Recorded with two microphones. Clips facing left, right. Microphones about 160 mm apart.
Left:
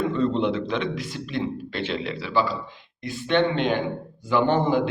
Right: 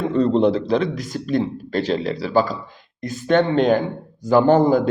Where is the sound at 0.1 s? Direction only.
40° right (ahead or behind).